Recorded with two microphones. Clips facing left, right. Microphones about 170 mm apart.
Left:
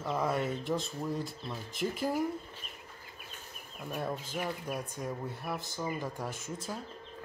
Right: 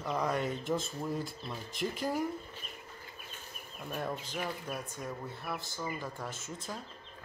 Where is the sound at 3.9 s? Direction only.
5° left (ahead or behind).